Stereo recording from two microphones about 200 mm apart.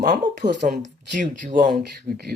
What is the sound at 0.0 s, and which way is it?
Speech, 40° right (ahead or behind).